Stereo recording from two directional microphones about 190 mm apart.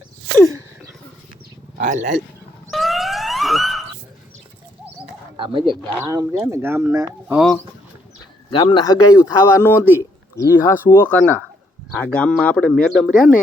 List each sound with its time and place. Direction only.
1.8 s speech: 40° right (ahead or behind)
2.6 s dog: centre (ahead or behind)
5.4 s speech: 25° right (ahead or behind)
8.4 s speech: 25° left (ahead or behind); by 13.3 s centre (ahead or behind)